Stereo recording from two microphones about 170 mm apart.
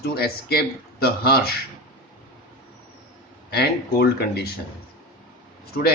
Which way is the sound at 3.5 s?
70° left (ahead or behind).